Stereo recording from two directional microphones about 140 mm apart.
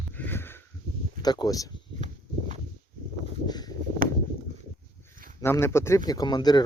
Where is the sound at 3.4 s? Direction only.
30° left (ahead or behind).